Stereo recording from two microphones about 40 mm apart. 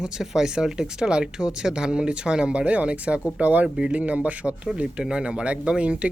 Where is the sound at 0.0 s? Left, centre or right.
Centre.